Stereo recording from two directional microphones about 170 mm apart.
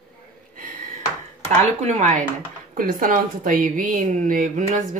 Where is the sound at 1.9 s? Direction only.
45° right (ahead or behind).